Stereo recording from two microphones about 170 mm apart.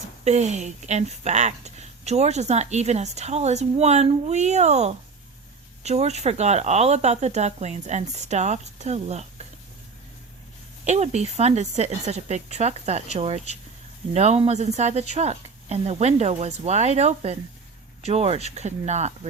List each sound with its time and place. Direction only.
0.3 s speech: 40° right (ahead or behind)
10.8 s speech: 40° right (ahead or behind)